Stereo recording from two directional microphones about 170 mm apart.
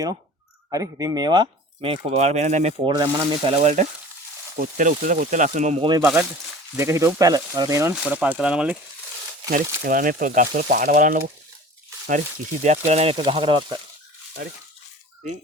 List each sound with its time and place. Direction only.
0.7 s speech: 20° right (ahead or behind)
2.0 s speech: 40° right (ahead or behind)
3.0 s speech: 25° right (ahead or behind); by 5.8 s 45° right (ahead or behind)
5.8 s speech: 25° right (ahead or behind); by 8.8 s 5° right (ahead or behind)
9.5 s speech: 55° right (ahead or behind)
12.6 s speech: 40° right (ahead or behind)